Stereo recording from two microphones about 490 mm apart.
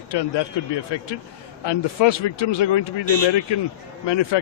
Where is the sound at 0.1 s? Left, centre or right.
Left.